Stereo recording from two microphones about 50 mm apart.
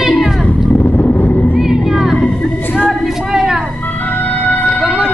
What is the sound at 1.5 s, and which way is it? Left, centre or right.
Music, centre.